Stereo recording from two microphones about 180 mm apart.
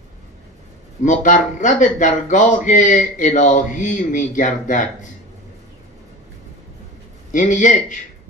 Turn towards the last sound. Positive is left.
turn(degrees=45)  # may be behind; listen again after turning